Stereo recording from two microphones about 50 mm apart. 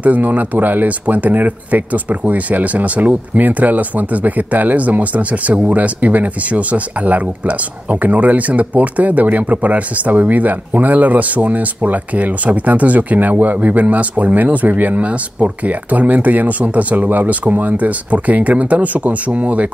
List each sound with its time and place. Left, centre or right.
0.0 s speech: right